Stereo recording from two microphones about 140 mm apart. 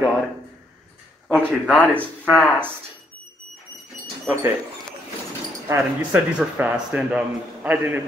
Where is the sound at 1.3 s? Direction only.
5° left (ahead or behind).